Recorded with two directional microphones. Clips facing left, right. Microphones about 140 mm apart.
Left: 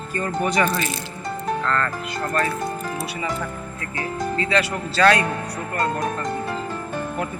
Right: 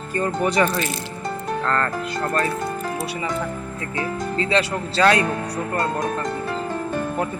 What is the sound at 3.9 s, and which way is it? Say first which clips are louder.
Speech: even; 25° right (ahead or behind).